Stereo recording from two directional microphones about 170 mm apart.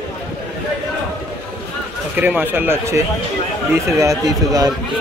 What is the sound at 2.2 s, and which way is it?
Speech, 10° right (ahead or behind).